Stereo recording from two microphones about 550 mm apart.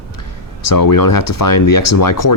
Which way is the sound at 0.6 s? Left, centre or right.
Left.